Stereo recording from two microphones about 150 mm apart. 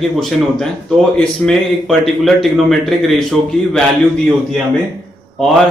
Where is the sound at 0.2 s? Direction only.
Centre (ahead or behind).